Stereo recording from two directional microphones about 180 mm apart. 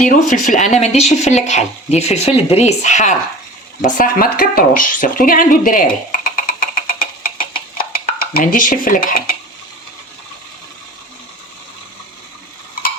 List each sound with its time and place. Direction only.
0.0 s speech: 45° left (ahead or behind)